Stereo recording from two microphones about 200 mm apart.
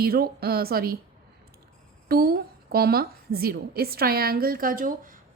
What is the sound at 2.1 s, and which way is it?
A woman's voice, 50° right (ahead or behind).